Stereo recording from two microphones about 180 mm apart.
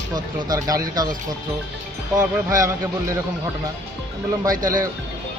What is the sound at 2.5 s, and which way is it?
Speech, 15° right (ahead or behind).